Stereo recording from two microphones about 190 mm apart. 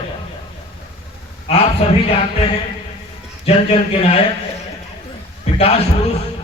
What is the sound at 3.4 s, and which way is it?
Speech, 35° left (ahead or behind).